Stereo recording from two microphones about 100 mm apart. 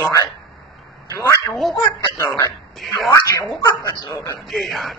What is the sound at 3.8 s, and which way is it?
Speech, 40° left (ahead or behind).